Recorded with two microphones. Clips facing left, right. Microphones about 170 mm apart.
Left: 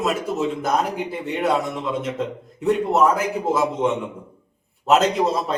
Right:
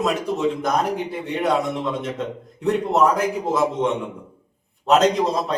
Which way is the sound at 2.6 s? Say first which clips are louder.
Left 1 dB; 5° left (ahead or behind).